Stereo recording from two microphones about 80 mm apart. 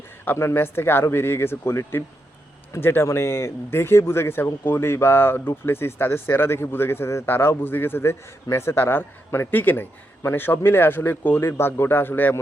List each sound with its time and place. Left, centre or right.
0.3 s speech: left